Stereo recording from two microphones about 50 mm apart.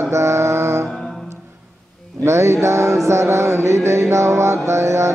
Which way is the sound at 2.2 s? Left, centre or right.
Right.